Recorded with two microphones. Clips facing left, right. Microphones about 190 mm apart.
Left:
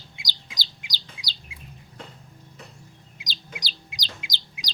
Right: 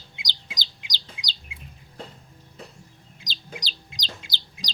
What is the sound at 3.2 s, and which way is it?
Bird, 10° left (ahead or behind).